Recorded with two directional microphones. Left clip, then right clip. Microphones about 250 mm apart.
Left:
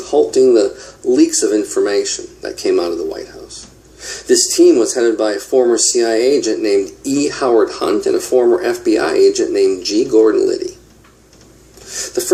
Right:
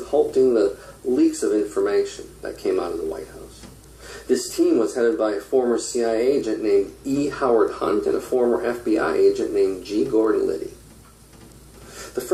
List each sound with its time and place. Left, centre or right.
0.0 s speech: left